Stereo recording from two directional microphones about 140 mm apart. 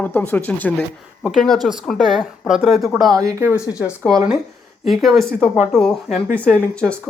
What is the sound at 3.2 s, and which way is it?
Speech, 15° right (ahead or behind).